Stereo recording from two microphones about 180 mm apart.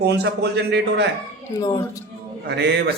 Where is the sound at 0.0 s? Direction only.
70° right (ahead or behind).